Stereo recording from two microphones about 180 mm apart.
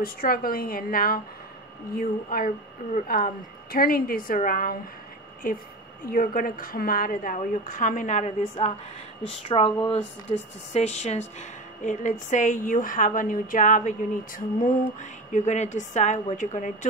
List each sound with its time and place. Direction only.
0.0 s a woman's voice: 55° left (ahead or behind)